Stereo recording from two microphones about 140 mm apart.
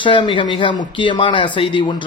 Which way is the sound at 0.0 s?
35° left (ahead or behind).